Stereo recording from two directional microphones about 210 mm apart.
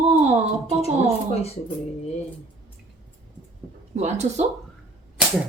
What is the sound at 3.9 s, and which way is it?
Speech, 35° right (ahead or behind).